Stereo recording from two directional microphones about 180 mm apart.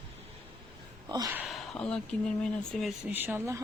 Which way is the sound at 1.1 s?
20° right (ahead or behind).